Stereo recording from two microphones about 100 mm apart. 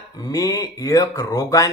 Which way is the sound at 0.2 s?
35° left (ahead or behind).